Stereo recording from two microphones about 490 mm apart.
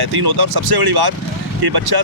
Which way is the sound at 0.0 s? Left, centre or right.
Right.